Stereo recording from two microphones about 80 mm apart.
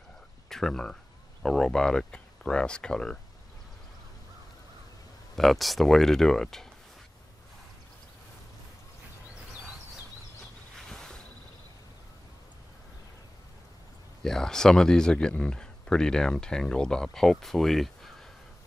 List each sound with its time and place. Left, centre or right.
0.5 s speech: centre
5.3 s speech: centre
10.8 s a sound: centre
14.2 s speech: centre